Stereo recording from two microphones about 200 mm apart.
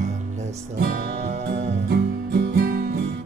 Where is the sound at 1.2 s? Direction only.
35° right (ahead or behind).